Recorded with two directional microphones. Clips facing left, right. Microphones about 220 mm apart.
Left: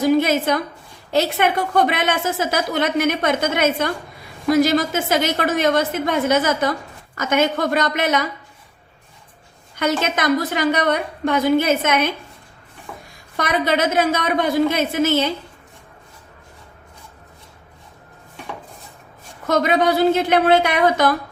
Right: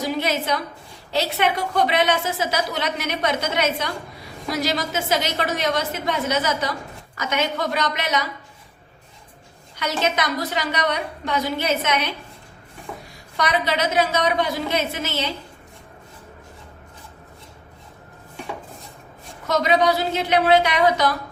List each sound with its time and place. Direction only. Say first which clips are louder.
0.0 s a woman's voice: left 7 dB; 50° left (ahead or behind)
9.7 s a woman's voice: left 3 dB; 50° left (ahead or behind)
13.3 s a woman's voice: left 3 dB; 50° left (ahead or behind)
19.5 s a woman's voice: left 2 dB; 50° left (ahead or behind)